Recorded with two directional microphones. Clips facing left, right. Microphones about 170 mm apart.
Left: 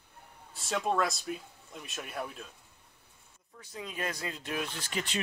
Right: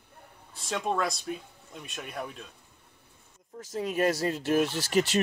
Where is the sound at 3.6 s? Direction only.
40° right (ahead or behind).